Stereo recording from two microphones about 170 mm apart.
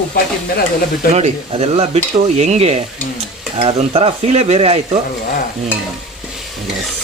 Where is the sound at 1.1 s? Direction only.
40° right (ahead or behind).